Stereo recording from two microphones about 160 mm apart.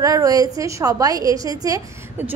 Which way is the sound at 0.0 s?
20° right (ahead or behind).